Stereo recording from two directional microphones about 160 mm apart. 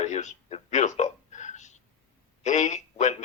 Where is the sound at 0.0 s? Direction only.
45° left (ahead or behind).